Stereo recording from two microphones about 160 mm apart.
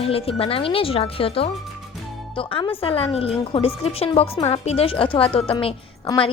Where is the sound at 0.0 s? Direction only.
35° left (ahead or behind).